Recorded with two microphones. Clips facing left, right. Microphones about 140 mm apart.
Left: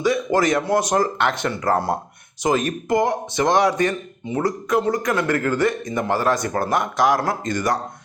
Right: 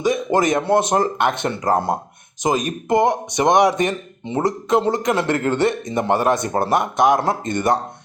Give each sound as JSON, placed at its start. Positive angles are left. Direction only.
{"t": 0.0, "sound": "a man's voice", "side_deg": -20}